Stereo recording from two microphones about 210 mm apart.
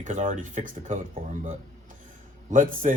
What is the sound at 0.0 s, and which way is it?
Speech, 40° right (ahead or behind).